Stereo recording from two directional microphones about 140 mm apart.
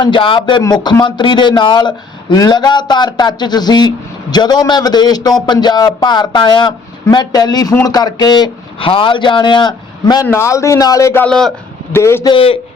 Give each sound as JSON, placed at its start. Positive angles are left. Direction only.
{"t": 0.0, "sound": "speech", "side_deg": 35}
{"t": 10.2, "sound": "a man's voice", "side_deg": 20}
{"t": 11.3, "sound": "speech", "side_deg": 5}
{"t": 11.9, "sound": "a man's voice", "side_deg": 15}
{"t": 12.3, "sound": "speech", "side_deg": 40}